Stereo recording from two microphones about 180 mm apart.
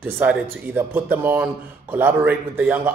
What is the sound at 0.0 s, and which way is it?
Speech, 10° right (ahead or behind).